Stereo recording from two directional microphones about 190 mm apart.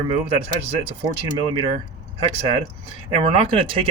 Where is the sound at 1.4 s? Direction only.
25° right (ahead or behind).